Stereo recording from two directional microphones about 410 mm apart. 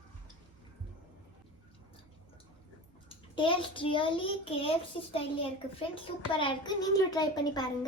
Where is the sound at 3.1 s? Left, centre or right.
Centre.